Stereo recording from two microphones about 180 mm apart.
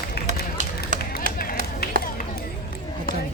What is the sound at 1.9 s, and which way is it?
Chop, 60° right (ahead or behind).